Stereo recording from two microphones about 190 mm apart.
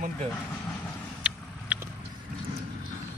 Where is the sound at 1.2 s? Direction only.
5° right (ahead or behind).